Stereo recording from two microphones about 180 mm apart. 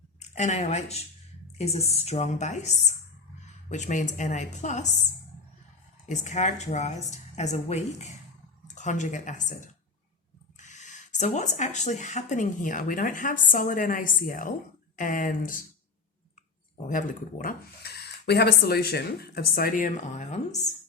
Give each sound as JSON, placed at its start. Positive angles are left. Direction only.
{"t": 0.2, "sound": "a woman's voice", "side_deg": 40}
{"t": 6.1, "sound": "a woman's voice", "side_deg": 40}
{"t": 16.8, "sound": "speech", "side_deg": 45}